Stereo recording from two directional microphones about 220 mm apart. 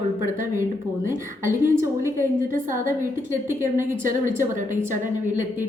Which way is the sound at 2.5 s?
35° right (ahead or behind).